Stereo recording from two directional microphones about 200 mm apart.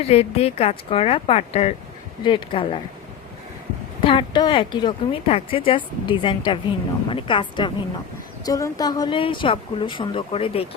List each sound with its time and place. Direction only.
0.0 s speech: 30° left (ahead or behind)
4.0 s speech: 25° left (ahead or behind)